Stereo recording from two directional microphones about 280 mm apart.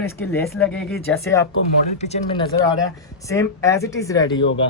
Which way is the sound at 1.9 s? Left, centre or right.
Left.